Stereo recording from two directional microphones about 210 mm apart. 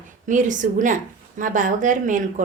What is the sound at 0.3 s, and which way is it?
A woman's voice, 35° right (ahead or behind).